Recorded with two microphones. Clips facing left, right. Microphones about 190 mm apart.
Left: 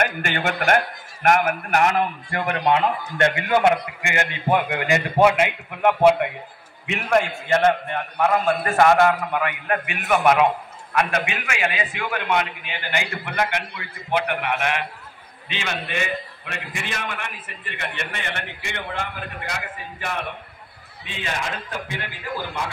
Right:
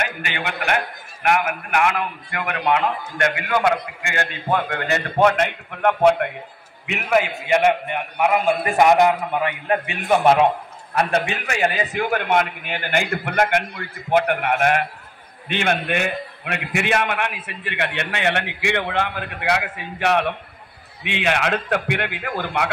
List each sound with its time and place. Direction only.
0.0 s a man's voice: 50° left (ahead or behind); by 14.9 s 45° right (ahead or behind)
15.4 s a man's voice: 55° right (ahead or behind)